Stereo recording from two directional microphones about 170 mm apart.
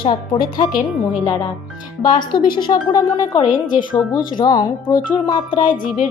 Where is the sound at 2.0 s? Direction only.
25° left (ahead or behind).